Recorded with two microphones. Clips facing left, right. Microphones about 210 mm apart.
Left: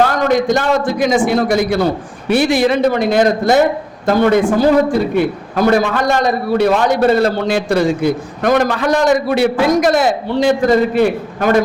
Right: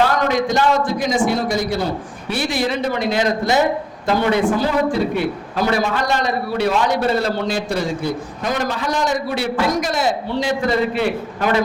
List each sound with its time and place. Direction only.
0.0 s a man's voice: 50° left (ahead or behind)
0.9 s a man's voice: 70° left (ahead or behind); by 6.7 s 50° left (ahead or behind)
7.2 s a man's voice: 60° left (ahead or behind); by 11.6 s 45° left (ahead or behind)